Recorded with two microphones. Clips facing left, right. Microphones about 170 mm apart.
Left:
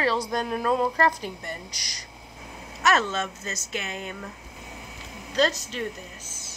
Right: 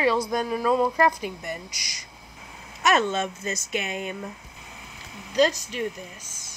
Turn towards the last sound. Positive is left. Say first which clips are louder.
# right 3 dB
turn(degrees=-15)  # may be behind; listen again after turning